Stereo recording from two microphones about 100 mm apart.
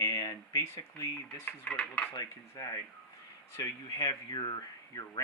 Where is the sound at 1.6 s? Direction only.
10° left (ahead or behind).